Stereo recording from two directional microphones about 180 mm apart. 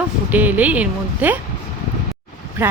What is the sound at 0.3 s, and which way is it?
Speech, 10° right (ahead or behind).